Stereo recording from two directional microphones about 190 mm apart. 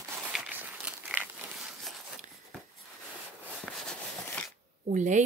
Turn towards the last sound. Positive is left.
turn(degrees=-40)  # may be behind; listen again after turning